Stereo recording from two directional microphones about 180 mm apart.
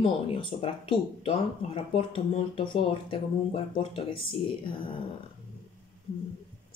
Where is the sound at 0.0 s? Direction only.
30° left (ahead or behind).